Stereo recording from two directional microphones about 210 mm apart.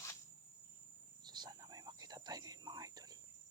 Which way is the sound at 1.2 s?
20° right (ahead or behind).